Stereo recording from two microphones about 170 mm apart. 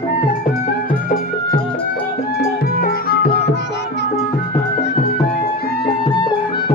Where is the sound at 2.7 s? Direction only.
65° left (ahead or behind).